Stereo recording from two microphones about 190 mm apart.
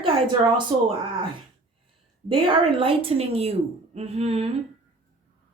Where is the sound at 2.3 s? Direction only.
30° right (ahead or behind).